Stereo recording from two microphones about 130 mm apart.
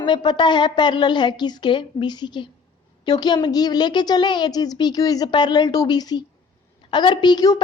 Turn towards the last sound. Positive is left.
turn(degrees=30)  # may be behind; listen again after turning